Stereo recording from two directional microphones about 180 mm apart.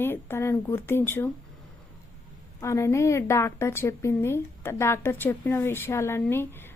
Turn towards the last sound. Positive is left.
turn(degrees=15)  # may be behind; listen again after turning